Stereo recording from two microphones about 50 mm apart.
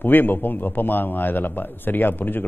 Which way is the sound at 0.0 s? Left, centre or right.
Left.